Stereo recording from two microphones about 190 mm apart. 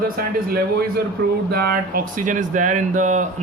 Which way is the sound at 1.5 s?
50° right (ahead or behind).